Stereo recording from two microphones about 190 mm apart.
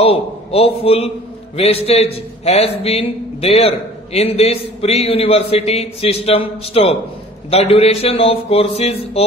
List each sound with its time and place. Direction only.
0.0 s a man's voice: 30° left (ahead or behind)